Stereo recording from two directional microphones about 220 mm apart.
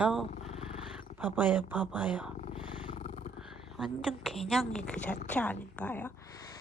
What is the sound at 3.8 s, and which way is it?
A woman's voice, centre (ahead or behind).